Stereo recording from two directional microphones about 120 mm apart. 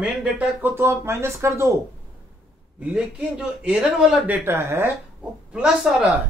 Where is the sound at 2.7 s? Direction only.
10° right (ahead or behind).